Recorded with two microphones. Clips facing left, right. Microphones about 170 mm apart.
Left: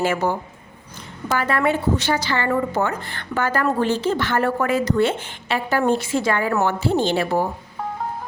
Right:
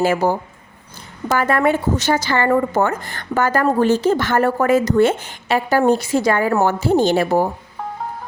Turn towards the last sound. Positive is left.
turn(degrees=-45)  # may be behind; listen again after turning